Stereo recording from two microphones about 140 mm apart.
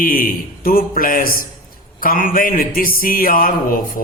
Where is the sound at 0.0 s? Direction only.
90° left.